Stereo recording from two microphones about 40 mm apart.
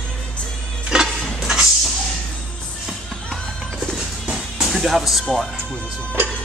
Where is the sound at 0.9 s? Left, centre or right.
Centre.